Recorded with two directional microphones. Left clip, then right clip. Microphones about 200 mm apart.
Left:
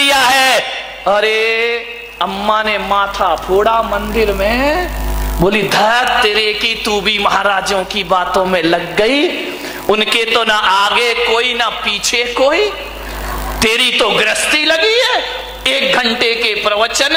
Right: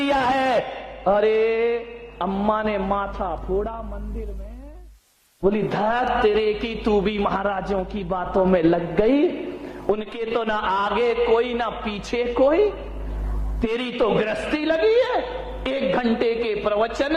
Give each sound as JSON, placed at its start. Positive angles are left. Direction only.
{"t": 0.0, "sound": "a sound", "side_deg": 10}
{"t": 1.0, "sound": "a man's voice", "side_deg": 10}
{"t": 5.5, "sound": "a man's voice", "side_deg": 5}